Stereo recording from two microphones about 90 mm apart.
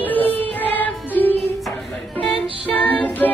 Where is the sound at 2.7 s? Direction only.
20° left (ahead or behind).